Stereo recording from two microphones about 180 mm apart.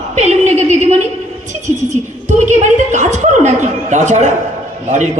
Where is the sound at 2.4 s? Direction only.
40° right (ahead or behind).